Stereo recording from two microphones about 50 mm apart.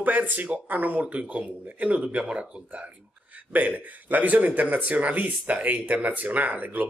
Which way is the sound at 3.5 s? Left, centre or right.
Right.